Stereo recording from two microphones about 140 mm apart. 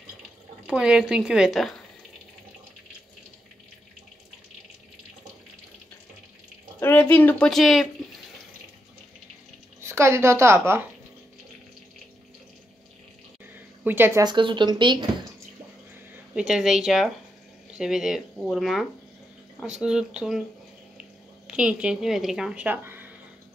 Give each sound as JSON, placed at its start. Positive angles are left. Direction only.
{"t": 0.7, "sound": "a woman's voice", "side_deg": -5}
{"t": 6.8, "sound": "speech", "side_deg": 15}
{"t": 9.8, "sound": "a woman's voice", "side_deg": -20}
{"t": 13.8, "sound": "speech", "side_deg": -15}
{"t": 14.2, "sound": "speech", "side_deg": -35}
{"t": 16.3, "sound": "a woman's voice", "side_deg": -5}